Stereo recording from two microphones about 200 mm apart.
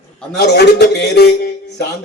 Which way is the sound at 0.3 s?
55° left (ahead or behind).